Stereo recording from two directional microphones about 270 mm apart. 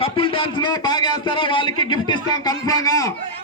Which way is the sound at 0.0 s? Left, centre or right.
Centre.